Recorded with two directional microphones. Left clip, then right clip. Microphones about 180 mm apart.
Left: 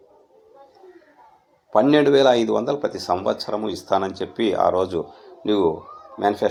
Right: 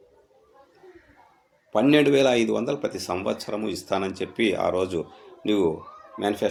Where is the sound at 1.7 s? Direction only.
20° right (ahead or behind).